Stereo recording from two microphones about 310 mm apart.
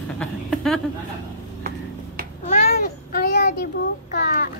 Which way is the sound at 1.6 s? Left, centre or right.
Right.